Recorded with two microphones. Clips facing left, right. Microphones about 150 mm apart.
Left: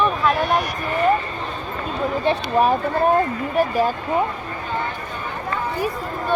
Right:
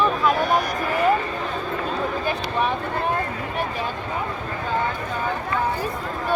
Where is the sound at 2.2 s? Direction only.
35° left (ahead or behind).